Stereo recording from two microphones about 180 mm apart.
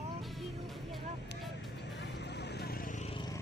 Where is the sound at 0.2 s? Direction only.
Centre (ahead or behind).